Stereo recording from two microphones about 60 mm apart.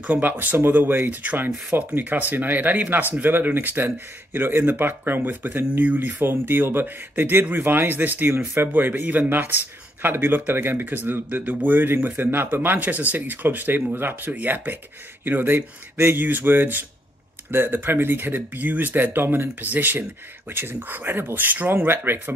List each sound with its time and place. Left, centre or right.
0.0 s speech: right